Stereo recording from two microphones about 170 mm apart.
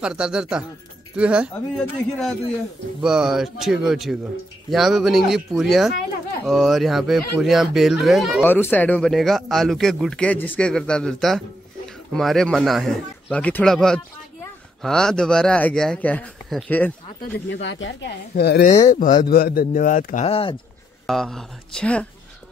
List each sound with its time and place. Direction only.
0.0 s a man's voice: 5° right (ahead or behind)
8.5 s a man's voice: 10° left (ahead or behind)
17.5 s speech: 90° left; by 18.7 s 70° left (ahead or behind)
18.9 s speech: 50° left (ahead or behind); by 20.5 s 35° left (ahead or behind)
21.1 s a man's voice: centre (ahead or behind)